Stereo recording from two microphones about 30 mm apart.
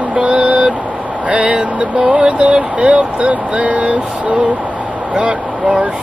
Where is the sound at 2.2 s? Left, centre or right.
Right.